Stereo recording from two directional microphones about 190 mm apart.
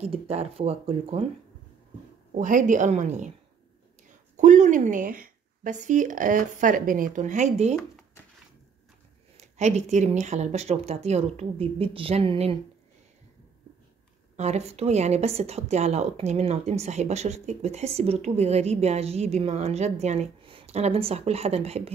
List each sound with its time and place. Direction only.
0.0 s a woman's voice: 35° right (ahead or behind)
2.3 s a woman's voice: 40° right (ahead or behind)
4.4 s a woman's voice: 40° right (ahead or behind)
9.4 s a woman's voice: 35° right (ahead or behind)
14.3 s a woman's voice: 35° right (ahead or behind)